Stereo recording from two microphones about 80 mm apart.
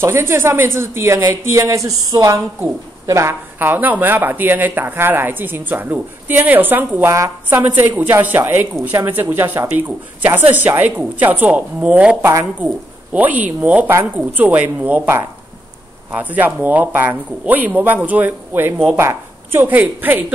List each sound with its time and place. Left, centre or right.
0.0 s speech: right
3.5 s speech: right
16.1 s speech: right